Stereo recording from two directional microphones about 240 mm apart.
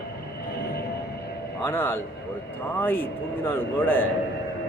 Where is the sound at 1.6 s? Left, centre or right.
Centre.